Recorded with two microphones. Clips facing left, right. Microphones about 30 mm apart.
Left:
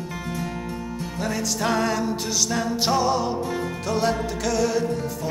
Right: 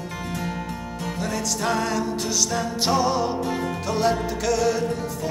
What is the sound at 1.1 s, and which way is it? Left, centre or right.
Music, centre.